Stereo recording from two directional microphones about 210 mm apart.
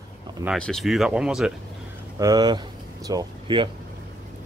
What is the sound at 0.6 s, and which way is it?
Speech, centre (ahead or behind).